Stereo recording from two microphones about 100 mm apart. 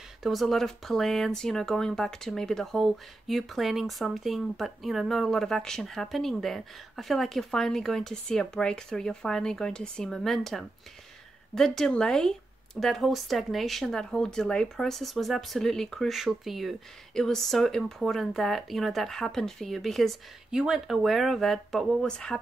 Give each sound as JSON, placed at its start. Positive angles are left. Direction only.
{"t": 0.2, "sound": "speech", "side_deg": 0}